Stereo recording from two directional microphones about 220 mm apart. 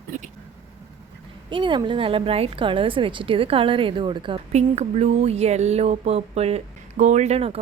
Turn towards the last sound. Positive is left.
turn(degrees=-30)  # may be behind; listen again after turning